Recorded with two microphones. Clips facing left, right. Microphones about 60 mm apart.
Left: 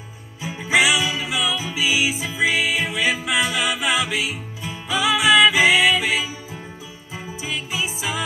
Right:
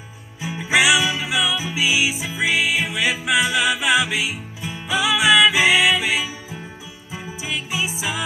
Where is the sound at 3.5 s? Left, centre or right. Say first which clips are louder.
Right 3 dB; right.